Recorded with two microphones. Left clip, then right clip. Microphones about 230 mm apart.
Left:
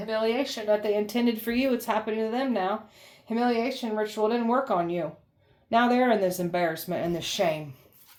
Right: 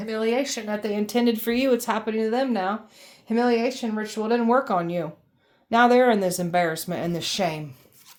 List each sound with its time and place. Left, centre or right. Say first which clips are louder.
0.1 s speech: right 2 dB; right